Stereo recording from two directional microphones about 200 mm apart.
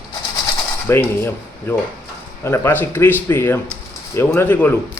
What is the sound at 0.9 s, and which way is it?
Speech, 10° left (ahead or behind).